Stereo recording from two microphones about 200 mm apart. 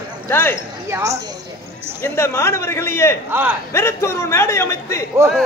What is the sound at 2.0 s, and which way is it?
A man's voice, 15° left (ahead or behind).